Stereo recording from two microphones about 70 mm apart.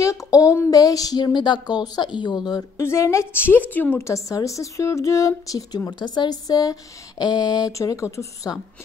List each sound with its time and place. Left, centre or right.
0.0 s a sound: left
0.7 s speech: left
2.8 s a woman's voice: left
3.3 s a woman's voice: left
4.0 s speech: left
5.9 s speech: left
7.7 s speech: left